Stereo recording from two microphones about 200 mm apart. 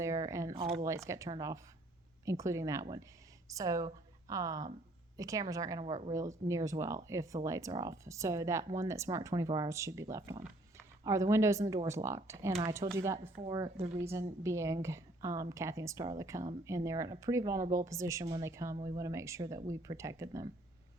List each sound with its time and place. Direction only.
0.0 s a sound: 15° right (ahead or behind)
0.6 s speech: 20° right (ahead or behind)
13.7 s speech: 30° right (ahead or behind)
14.0 s speech: 10° right (ahead or behind)